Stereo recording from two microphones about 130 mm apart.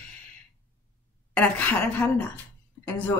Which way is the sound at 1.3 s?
10° left (ahead or behind).